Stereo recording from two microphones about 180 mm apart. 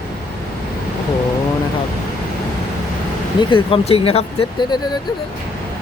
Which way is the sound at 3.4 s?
30° left (ahead or behind).